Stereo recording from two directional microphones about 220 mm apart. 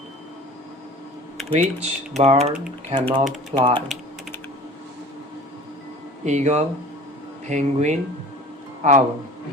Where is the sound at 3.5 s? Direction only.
20° right (ahead or behind).